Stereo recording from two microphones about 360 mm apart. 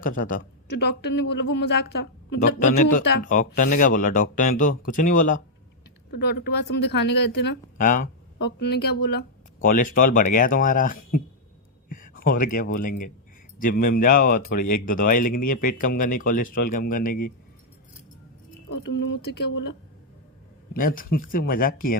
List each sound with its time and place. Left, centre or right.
0.0 s speech: left
11.9 s a sound: left
12.6 s speech: left
19.3 s speech: left
20.7 s speech: left